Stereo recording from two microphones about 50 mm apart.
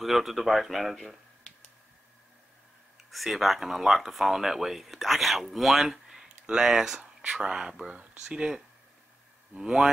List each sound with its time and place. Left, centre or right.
0.0 s speech: centre
3.1 s speech: centre
7.2 s speech: right